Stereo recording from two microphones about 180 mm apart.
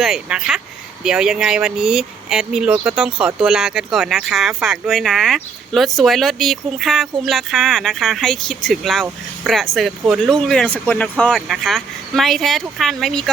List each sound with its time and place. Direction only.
0.0 s speech: 5° right (ahead or behind)